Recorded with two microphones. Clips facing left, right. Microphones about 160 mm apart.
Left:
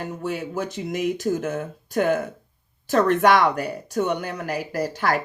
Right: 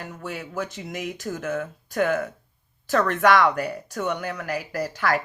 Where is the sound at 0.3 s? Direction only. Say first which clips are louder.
Left 3 dB; 30° left (ahead or behind).